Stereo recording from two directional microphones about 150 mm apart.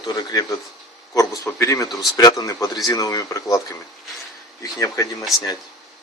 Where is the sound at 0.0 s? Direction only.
25° left (ahead or behind).